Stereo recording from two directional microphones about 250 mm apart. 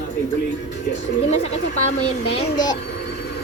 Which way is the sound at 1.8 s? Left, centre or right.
Left.